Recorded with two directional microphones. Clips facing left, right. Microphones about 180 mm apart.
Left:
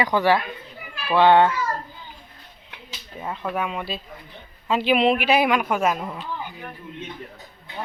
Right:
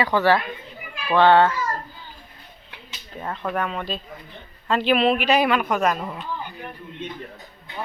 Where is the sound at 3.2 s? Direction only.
10° left (ahead or behind).